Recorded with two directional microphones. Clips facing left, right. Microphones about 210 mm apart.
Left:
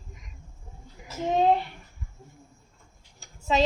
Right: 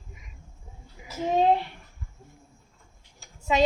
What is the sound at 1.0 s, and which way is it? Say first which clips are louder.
Speech: right 1 dB; 10° right (ahead or behind).